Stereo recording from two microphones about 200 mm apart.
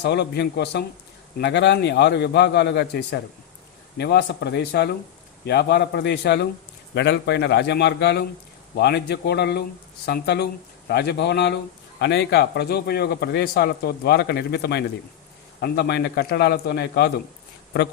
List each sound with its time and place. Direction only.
0.0 s a man's voice: 55° left (ahead or behind)